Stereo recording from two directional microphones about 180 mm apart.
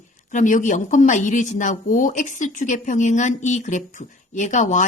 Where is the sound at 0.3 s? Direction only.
45° left (ahead or behind).